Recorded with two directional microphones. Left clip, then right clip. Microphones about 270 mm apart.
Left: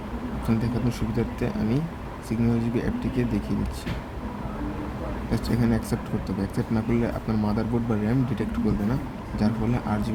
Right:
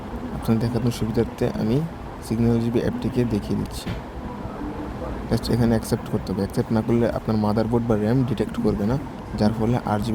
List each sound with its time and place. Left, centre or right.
0.4 s speech: centre
5.3 s speech: centre